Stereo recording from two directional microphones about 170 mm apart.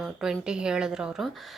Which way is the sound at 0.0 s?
Centre (ahead or behind).